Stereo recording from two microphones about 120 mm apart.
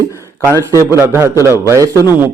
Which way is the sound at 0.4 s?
25° right (ahead or behind).